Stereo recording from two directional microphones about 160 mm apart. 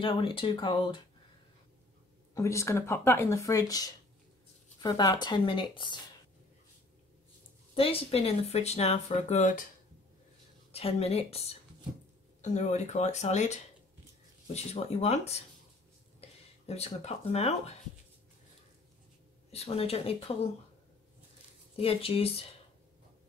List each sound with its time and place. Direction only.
0.0 s speech: 35° left (ahead or behind)
2.3 s speech: 20° left (ahead or behind)
7.7 s speech: 35° left (ahead or behind); by 9.7 s 55° left (ahead or behind)
10.7 s speech: 40° left (ahead or behind)
19.5 s speech: 40° left (ahead or behind)
21.7 s speech: 35° left (ahead or behind)